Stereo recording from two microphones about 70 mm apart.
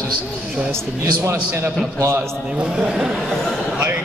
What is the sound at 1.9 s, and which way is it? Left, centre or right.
Speech, right.